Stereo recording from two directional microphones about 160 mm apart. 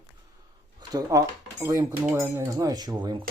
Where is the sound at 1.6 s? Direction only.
20° right (ahead or behind).